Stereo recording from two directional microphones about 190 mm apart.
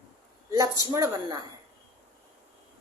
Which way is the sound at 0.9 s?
20° right (ahead or behind).